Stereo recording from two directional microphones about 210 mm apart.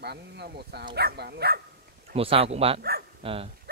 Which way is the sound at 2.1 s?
25° right (ahead or behind).